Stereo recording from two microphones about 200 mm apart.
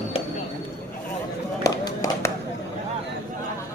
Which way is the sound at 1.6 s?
15° left (ahead or behind).